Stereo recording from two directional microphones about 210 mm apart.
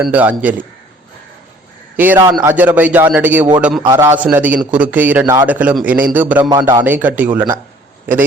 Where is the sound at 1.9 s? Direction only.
10° right (ahead or behind).